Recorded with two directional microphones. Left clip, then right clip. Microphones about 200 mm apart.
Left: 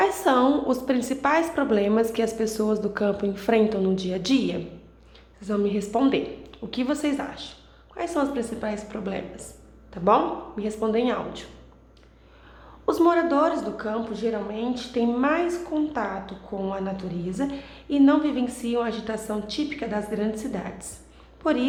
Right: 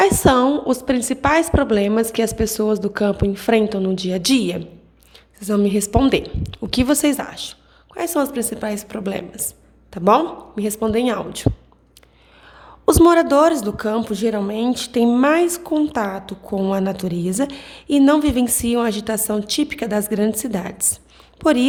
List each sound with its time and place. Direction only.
0.0 s a woman's voice: 40° right (ahead or behind)
12.8 s a woman's voice: 45° right (ahead or behind)